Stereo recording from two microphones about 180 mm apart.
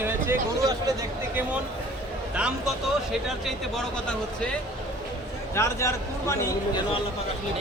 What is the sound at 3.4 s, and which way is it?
A man's voice, 5° left (ahead or behind).